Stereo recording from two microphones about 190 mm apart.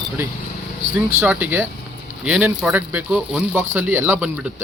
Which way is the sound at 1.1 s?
10° right (ahead or behind).